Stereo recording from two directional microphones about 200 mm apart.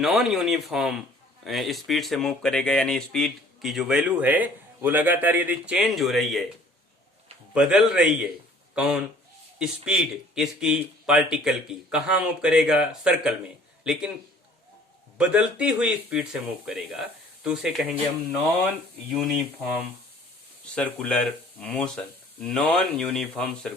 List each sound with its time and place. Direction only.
0.0 s speech: centre (ahead or behind)
7.5 s speech: 5° right (ahead or behind)
15.2 s speech: 5° right (ahead or behind)
19.1 s speech: centre (ahead or behind)